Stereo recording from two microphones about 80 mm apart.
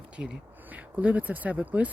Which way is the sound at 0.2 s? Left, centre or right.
Centre.